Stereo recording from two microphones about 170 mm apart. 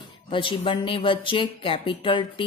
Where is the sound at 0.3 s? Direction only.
30° left (ahead or behind).